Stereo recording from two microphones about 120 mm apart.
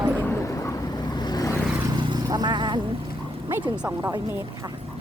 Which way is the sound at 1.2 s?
35° left (ahead or behind).